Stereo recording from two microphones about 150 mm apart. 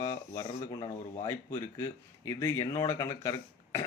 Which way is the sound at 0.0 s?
25° left (ahead or behind).